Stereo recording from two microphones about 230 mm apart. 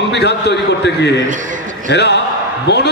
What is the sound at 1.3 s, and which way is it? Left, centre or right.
Speech, right.